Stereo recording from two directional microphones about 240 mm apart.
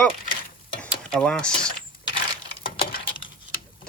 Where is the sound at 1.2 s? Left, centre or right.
Centre.